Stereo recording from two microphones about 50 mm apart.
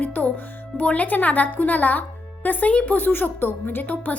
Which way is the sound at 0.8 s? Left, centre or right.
Left.